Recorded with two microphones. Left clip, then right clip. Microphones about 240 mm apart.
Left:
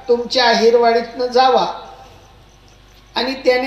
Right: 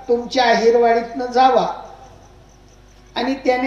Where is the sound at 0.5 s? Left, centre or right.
Left.